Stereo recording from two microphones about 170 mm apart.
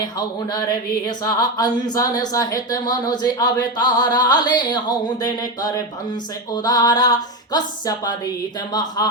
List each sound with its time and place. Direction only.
0.0 s speech: 25° left (ahead or behind)